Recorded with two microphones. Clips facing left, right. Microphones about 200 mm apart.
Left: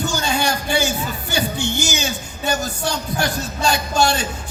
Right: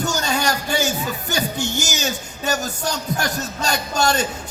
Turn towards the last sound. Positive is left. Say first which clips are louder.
# left 1 dB
turn(degrees=-40)  # may be behind; listen again after turning